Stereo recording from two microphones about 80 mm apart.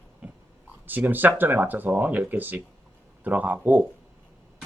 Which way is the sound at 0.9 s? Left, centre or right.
Right.